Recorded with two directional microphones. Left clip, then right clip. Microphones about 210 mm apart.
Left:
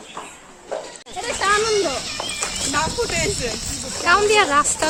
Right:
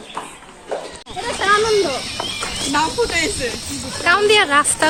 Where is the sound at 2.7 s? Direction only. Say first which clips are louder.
Right 5 dB; 45° left (ahead or behind).